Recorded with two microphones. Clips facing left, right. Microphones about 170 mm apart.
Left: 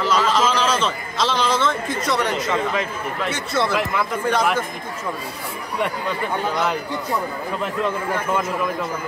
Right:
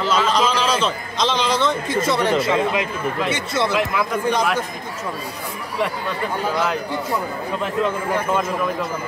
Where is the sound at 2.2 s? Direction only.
30° right (ahead or behind).